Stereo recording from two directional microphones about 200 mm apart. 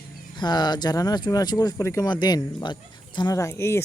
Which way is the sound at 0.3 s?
20° left (ahead or behind).